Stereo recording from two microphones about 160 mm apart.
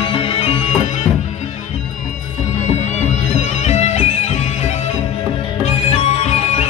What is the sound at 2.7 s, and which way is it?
Music, 45° left (ahead or behind).